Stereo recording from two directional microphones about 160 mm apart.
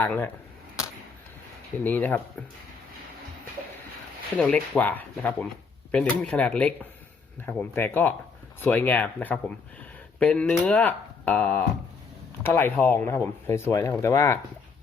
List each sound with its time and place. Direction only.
0.0 s speech: 15° left (ahead or behind)
1.8 s speech: 10° left (ahead or behind)
4.4 s speech: 10° left (ahead or behind)